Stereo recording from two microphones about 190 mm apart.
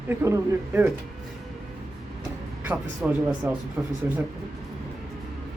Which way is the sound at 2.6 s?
5° right (ahead or behind).